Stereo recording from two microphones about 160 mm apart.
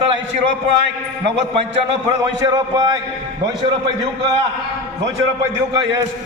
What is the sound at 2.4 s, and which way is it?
Speech, 25° right (ahead or behind).